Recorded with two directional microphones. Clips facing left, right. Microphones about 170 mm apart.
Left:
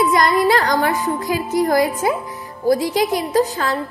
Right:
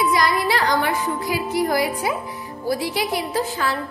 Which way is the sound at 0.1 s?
45° left (ahead or behind).